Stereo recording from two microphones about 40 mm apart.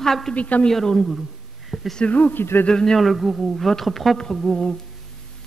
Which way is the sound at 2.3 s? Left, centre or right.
Left.